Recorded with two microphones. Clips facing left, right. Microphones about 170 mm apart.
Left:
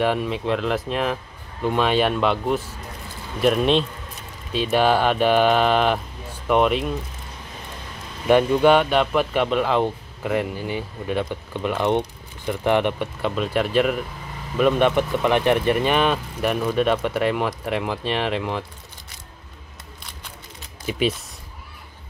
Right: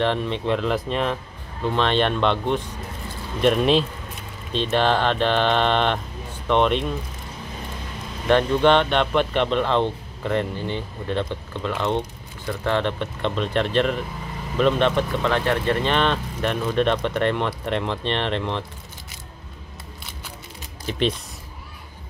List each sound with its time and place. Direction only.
0.0 s speech: 10° left (ahead or behind)
8.3 s speech: 10° left (ahead or behind)
20.9 s speech: 10° left (ahead or behind)